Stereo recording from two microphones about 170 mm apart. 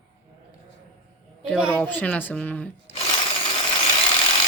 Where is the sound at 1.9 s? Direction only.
10° left (ahead or behind).